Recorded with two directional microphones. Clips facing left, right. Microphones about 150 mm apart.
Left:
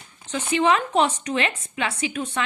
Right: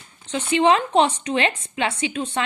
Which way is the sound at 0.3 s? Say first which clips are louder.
Right 3 dB; 30° right (ahead or behind).